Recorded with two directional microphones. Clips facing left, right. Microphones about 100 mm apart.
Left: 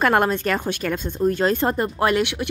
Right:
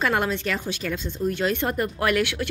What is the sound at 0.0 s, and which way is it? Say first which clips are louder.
Speech: left 5 dB; 50° left (ahead or behind).